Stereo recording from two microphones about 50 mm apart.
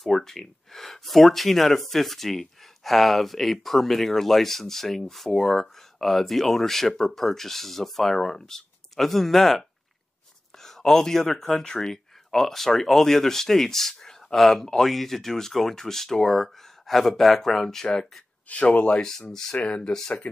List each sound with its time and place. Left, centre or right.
0.0 s speech: centre
18.5 s speech: left
18.9 s speech: centre
19.5 s speech: left
19.9 s speech: centre